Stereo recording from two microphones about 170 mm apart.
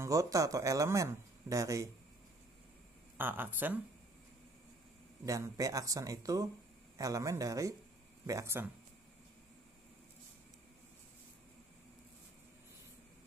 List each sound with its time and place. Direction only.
0.0 s speech: 20° right (ahead or behind)
3.2 s speech: 10° right (ahead or behind)
5.2 s speech: 20° right (ahead or behind)